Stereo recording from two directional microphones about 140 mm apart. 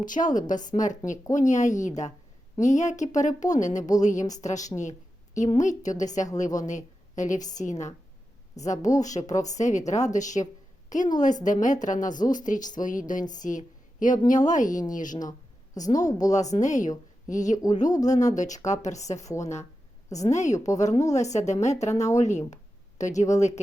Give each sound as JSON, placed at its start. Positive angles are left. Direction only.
{"t": 0.0, "sound": "a woman's voice", "side_deg": 70}
{"t": 4.8, "sound": "a sound", "side_deg": 60}
{"t": 5.5, "sound": "a woman's voice", "side_deg": 60}
{"t": 15.3, "sound": "a woman's voice", "side_deg": 25}
{"t": 16.3, "sound": "speech", "side_deg": 55}
{"t": 20.1, "sound": "a woman's voice", "side_deg": 25}
{"t": 20.3, "sound": "a woman's voice", "side_deg": 55}